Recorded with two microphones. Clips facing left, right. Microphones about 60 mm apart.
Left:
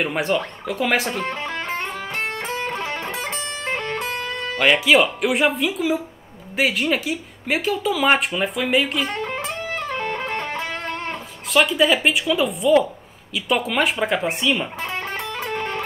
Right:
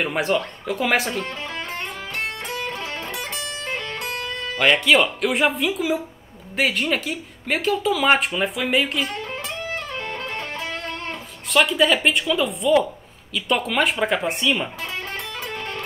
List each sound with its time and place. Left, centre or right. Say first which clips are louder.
0.0 s speech: even; centre
1.2 s music: left 4 dB; left
4.6 s speech: left 1 dB; centre
9.1 s music: left 3 dB; left
11.5 s speech: left 1 dB; centre
14.8 s music: left 3 dB; left